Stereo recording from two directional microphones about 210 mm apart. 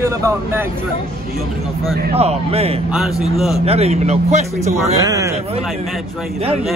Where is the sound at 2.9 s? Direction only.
Centre (ahead or behind).